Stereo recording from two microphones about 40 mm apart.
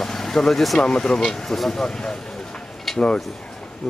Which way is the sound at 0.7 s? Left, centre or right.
Centre.